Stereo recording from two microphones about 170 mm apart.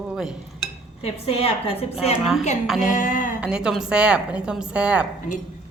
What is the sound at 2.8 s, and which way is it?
Speech, 50° left (ahead or behind).